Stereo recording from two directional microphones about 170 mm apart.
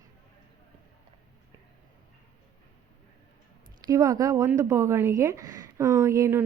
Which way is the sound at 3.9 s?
20° right (ahead or behind).